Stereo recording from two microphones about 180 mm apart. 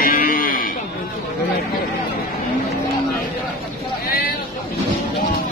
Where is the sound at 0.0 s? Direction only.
50° left (ahead or behind).